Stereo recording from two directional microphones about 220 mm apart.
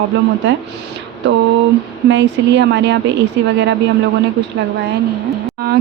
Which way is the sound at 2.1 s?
55° right (ahead or behind).